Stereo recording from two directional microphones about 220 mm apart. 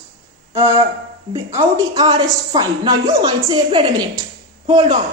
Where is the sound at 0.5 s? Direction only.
10° right (ahead or behind).